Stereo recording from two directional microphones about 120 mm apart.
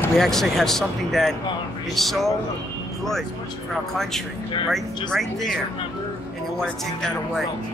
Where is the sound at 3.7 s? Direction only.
5° left (ahead or behind).